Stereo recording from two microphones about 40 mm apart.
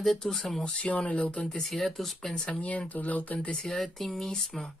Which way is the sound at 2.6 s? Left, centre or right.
Left.